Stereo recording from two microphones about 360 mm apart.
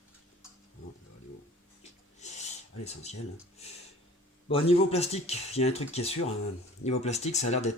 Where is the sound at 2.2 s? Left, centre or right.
Centre.